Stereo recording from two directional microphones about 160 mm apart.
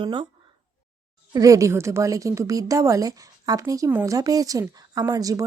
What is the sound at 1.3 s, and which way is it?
A woman's voice, 20° right (ahead or behind).